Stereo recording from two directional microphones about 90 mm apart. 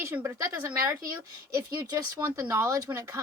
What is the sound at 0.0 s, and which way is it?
Speech, 25° right (ahead or behind).